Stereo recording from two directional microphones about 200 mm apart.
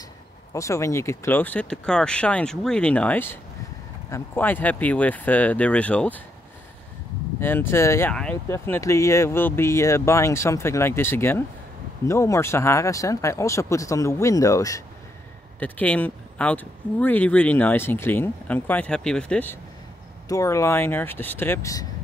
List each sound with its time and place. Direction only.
0.5 s speech: 15° left (ahead or behind)
7.3 s speech: 10° left (ahead or behind)